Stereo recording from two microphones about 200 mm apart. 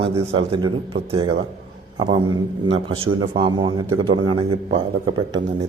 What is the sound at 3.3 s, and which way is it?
A man's voice, 25° right (ahead or behind).